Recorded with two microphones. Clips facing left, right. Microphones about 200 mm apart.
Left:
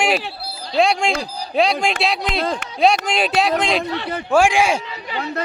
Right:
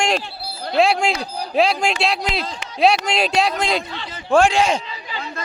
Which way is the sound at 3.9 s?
60° left (ahead or behind).